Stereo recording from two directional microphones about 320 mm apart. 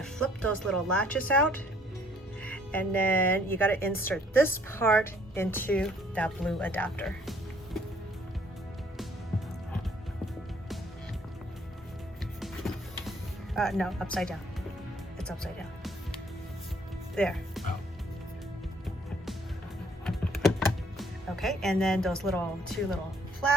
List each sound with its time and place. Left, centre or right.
0.0 s speech: centre
12.4 s music: centre
15.2 s speech: centre
17.2 s speech: centre
20.1 s typing: centre